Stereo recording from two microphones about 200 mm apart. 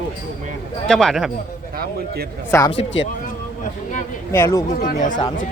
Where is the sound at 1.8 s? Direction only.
50° right (ahead or behind).